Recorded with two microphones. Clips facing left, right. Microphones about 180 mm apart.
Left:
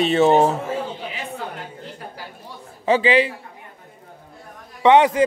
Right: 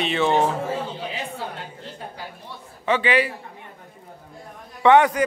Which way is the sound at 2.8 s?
30° left (ahead or behind).